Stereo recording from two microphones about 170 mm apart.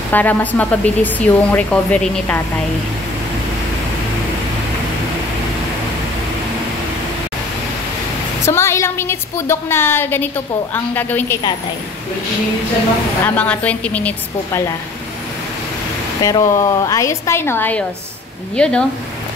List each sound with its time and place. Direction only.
0.1 s a woman's voice: 10° left (ahead or behind)
8.5 s a woman's voice: 15° left (ahead or behind)
13.2 s a woman's voice: 10° left (ahead or behind)
16.2 s a woman's voice: 20° left (ahead or behind)